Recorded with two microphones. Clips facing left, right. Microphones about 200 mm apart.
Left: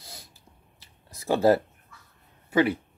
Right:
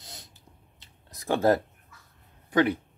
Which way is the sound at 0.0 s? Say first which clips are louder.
Left 1 dB; 20° right (ahead or behind).